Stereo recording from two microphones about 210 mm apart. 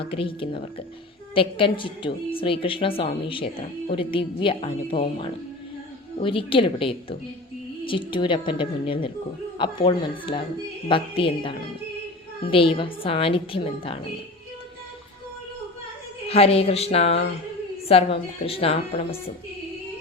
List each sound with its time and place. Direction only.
0.0 s a woman's voice: 25° left (ahead or behind)
16.3 s a woman's voice: 30° left (ahead or behind)